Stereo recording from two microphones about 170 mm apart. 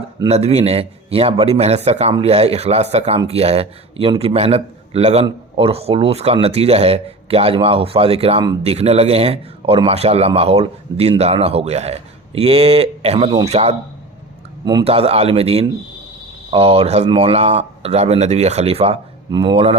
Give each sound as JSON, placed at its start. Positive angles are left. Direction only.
{"t": 0.3, "sound": "speech", "side_deg": -40}
{"t": 14.6, "sound": "a man's voice", "side_deg": -25}
{"t": 14.8, "sound": "speech", "side_deg": -35}
{"t": 19.3, "sound": "speech", "side_deg": -25}